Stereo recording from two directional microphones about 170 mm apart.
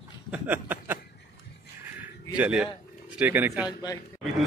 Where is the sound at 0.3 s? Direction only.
10° right (ahead or behind).